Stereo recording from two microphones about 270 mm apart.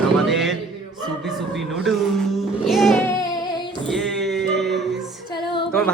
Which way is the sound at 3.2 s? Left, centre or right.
Centre.